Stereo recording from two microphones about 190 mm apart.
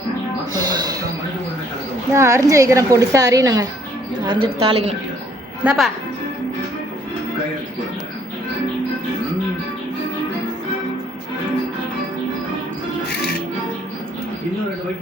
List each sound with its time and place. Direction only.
0.5 s music: 20° right (ahead or behind)
2.1 s a woman's voice: 15° right (ahead or behind); by 4.9 s 30° right (ahead or behind)
5.6 s speech: centre (ahead or behind)